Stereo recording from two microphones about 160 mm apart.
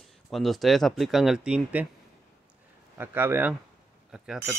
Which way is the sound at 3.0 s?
15° right (ahead or behind).